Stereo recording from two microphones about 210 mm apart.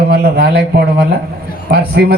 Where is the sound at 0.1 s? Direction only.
45° right (ahead or behind).